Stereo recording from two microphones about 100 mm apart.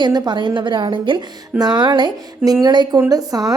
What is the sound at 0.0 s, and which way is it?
A woman's voice, 45° right (ahead or behind).